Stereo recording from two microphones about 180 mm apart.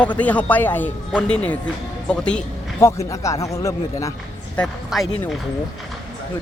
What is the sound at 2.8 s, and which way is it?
A man's voice, 15° left (ahead or behind).